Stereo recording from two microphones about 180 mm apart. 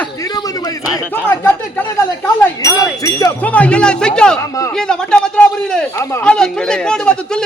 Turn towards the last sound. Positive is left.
turn(degrees=5)  # may be behind; listen again after turning